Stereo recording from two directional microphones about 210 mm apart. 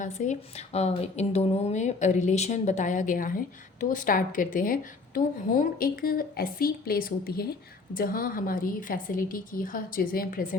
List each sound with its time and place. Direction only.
0.0 s speech: 35° left (ahead or behind)